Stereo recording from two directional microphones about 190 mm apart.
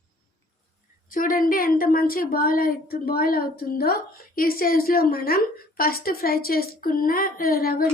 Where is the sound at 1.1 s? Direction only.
45° left (ahead or behind).